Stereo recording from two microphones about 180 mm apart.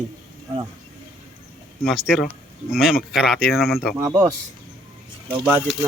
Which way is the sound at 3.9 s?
20° right (ahead or behind).